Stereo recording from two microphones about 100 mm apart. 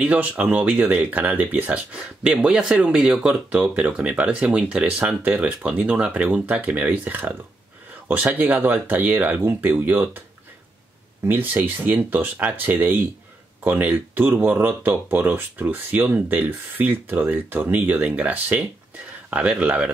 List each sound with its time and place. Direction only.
0.0 s speech: 15° right (ahead or behind)
11.2 s speech: 20° right (ahead or behind)